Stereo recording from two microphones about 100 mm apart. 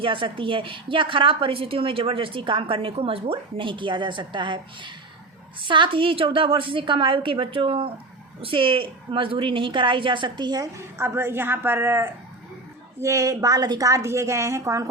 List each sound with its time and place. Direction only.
0.0 s a woman's voice: 60° right (ahead or behind)
10.9 s a woman's voice: 25° right (ahead or behind)